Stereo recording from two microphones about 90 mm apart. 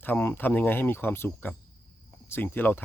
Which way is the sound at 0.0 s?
25° left (ahead or behind).